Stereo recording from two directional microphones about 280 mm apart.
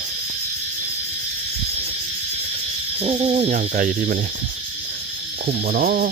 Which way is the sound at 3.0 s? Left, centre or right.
Right.